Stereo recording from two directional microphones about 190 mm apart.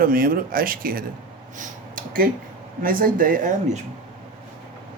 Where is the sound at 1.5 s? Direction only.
45° right (ahead or behind).